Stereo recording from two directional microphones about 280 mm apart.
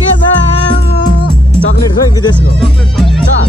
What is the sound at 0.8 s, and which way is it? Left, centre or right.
Music, left.